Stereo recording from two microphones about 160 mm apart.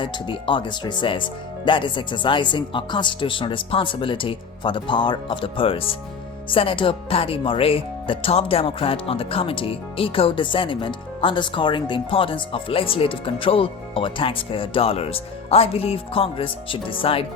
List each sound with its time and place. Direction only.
0.0 s speech: 30° left (ahead or behind)